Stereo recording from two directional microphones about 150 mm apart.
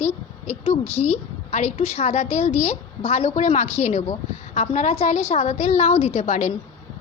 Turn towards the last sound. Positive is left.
turn(degrees=50)  # may be behind; listen again after turning